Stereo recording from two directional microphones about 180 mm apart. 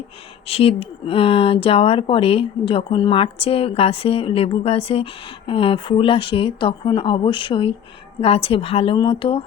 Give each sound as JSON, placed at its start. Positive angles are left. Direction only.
{"t": 0.4, "sound": "speech", "side_deg": 30}